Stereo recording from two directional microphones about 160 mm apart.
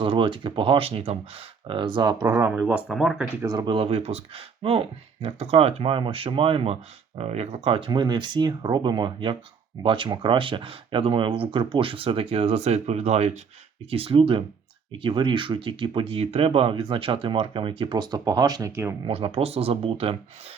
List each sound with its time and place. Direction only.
0.0 s speech: 35° right (ahead or behind); by 2.5 s 20° right (ahead or behind)
2.6 s speech: 5° right (ahead or behind)
3.4 s speech: 25° right (ahead or behind)
19.0 s speech: 35° right (ahead or behind)